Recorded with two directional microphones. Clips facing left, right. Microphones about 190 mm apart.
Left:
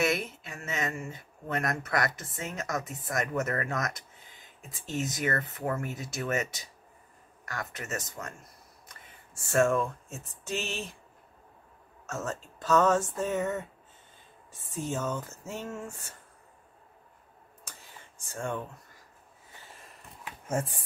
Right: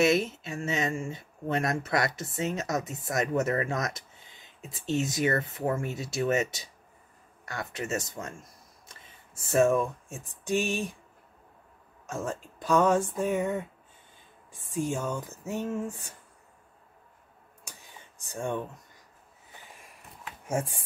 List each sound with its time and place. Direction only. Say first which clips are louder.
0.0 s speech: right 5 dB; 25° right (ahead or behind)
4.6 s speech: right 5 dB; 50° left (ahead or behind)
4.8 s speech: right 4 dB; 25° right (ahead or behind)
12.1 s speech: right 2 dB; 10° right (ahead or behind)
17.6 s a sound: right 1 dB; 20° right (ahead or behind)
19.6 s a sound: left 1 dB; 15° right (ahead or behind)
20.4 s speech: right 1 dB; 10° right (ahead or behind)